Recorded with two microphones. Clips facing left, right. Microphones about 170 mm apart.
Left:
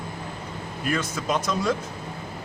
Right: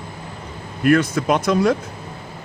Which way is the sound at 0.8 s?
60° right (ahead or behind).